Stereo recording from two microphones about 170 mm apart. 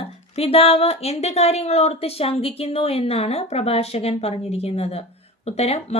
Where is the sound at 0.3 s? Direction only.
35° left (ahead or behind).